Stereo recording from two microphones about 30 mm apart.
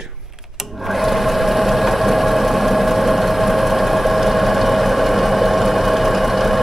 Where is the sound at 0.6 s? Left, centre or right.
Centre.